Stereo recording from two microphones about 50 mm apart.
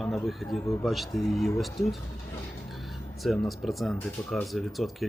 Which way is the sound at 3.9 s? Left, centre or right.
Left.